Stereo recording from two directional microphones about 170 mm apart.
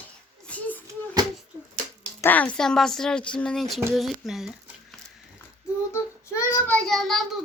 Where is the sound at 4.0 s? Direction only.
Centre (ahead or behind).